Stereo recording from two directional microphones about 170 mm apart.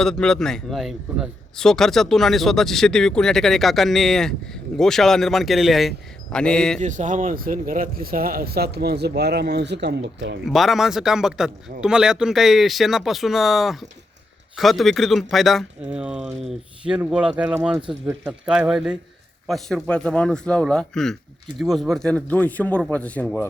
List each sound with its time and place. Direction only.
0.0 s a man's voice: 5° left (ahead or behind)
6.7 s speech: 45° right (ahead or behind); by 10.3 s 90° right
10.4 s a man's voice: centre (ahead or behind)